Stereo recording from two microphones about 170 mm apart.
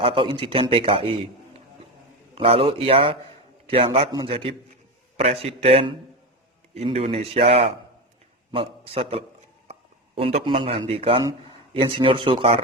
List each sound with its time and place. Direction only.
0.0 s a man's voice: 30° right (ahead or behind)
2.3 s a man's voice: 35° right (ahead or behind)